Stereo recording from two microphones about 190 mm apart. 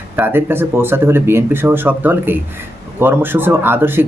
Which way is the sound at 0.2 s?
10° right (ahead or behind).